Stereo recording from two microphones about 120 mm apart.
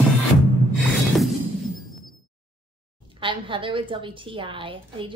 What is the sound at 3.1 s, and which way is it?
A woman's voice, 45° right (ahead or behind).